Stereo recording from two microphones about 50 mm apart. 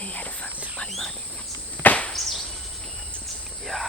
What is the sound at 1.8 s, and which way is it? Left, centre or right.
Chop, left.